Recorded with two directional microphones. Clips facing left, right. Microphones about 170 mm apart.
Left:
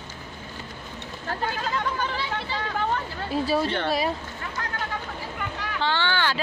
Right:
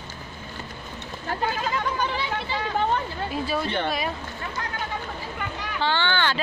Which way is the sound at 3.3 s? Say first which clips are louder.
Left 5 dB; 35° left (ahead or behind).